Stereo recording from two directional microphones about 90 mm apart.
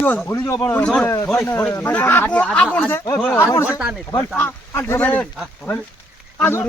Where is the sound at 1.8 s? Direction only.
20° left (ahead or behind).